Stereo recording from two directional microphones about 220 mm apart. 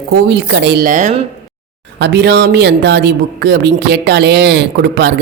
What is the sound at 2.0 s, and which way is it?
A man's voice, 50° right (ahead or behind).